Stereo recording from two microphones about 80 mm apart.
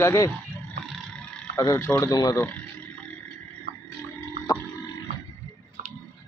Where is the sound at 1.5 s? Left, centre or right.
Left.